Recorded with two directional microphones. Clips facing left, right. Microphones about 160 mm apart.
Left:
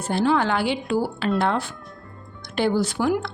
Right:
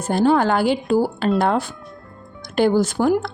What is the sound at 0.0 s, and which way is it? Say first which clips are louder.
A woman's voice: right 4 dB; 45° right (ahead or behind).